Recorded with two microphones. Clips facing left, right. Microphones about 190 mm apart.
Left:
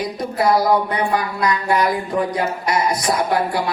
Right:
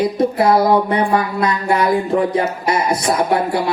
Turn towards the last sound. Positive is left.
turn(degrees=-25)  # may be behind; listen again after turning